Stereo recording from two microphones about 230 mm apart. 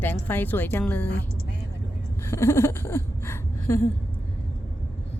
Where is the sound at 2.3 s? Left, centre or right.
Centre.